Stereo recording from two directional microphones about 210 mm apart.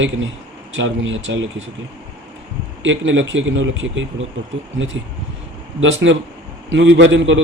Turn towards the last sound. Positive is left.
turn(degrees=-65)  # may be behind; listen again after turning